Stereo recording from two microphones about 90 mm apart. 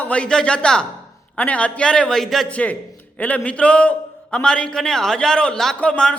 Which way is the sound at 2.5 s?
15° left (ahead or behind).